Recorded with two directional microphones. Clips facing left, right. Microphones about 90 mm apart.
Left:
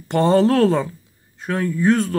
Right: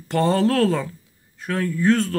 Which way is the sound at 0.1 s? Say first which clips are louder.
Left 4 dB; 20° left (ahead or behind).